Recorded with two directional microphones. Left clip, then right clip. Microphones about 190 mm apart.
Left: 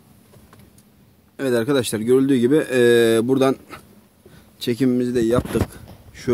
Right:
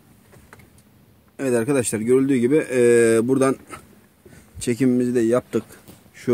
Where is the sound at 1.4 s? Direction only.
Centre (ahead or behind).